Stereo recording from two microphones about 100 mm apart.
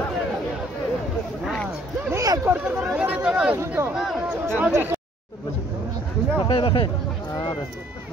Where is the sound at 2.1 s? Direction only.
35° right (ahead or behind).